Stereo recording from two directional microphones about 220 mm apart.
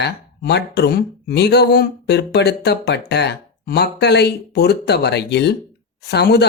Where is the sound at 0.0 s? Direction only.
50° left (ahead or behind).